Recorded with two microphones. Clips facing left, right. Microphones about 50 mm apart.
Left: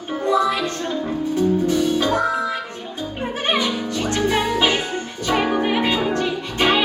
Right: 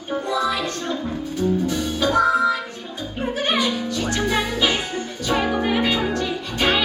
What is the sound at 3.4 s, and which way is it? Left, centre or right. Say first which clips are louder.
Music: left 1 dB; left.